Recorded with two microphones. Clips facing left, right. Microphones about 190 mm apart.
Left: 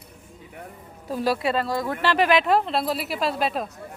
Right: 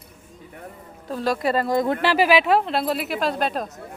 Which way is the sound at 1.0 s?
10° left (ahead or behind).